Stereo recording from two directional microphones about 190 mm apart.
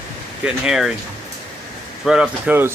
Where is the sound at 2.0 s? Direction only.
5° right (ahead or behind).